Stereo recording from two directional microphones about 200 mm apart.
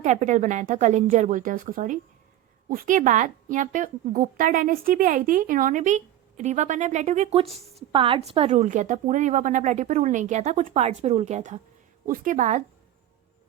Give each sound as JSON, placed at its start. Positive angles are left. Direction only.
{"t": 0.0, "sound": "a woman's voice", "side_deg": -35}